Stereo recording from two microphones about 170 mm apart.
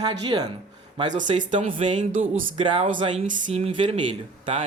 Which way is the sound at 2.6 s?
30° right (ahead or behind).